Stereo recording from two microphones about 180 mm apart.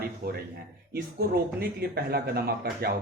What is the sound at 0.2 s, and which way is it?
Speech, 60° right (ahead or behind).